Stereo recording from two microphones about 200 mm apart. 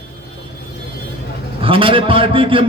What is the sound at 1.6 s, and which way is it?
A man's voice, 25° right (ahead or behind).